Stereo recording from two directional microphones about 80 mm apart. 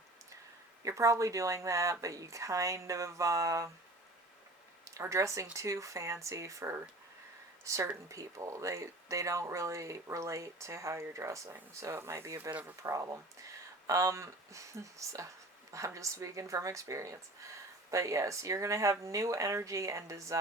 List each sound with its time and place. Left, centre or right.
0.8 s speech: right
4.9 s speech: right
12.4 s speech: right
12.8 s speech: right